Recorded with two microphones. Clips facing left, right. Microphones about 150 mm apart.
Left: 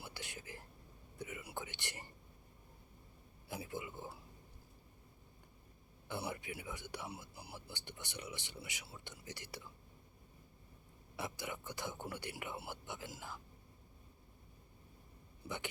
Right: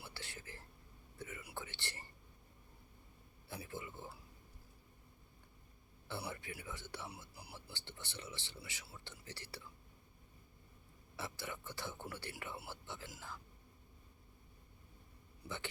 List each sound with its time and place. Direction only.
0.0 s whispering: 15° left (ahead or behind)
3.5 s a sound: 15° left (ahead or behind)
6.1 s a sound: 15° left (ahead or behind)
7.5 s speech: 15° left (ahead or behind)
11.2 s speech: 15° left (ahead or behind)
15.4 s speech: 15° left (ahead or behind)